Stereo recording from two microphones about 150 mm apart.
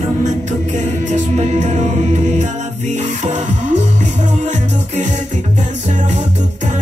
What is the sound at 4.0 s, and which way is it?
Music, 50° right (ahead or behind).